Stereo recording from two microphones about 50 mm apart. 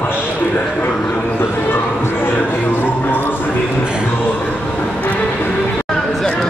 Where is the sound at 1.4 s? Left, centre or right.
Left.